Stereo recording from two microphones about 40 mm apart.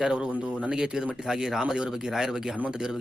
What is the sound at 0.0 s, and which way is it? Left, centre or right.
Speech, centre.